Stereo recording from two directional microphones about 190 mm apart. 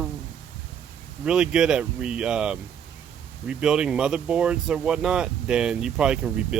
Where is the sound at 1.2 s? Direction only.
5° right (ahead or behind).